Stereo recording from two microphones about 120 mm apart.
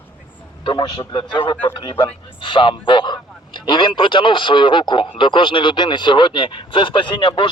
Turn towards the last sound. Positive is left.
turn(degrees=45)  # may be behind; listen again after turning